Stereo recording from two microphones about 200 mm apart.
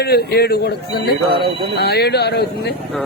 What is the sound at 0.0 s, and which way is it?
A man's voice, 50° left (ahead or behind).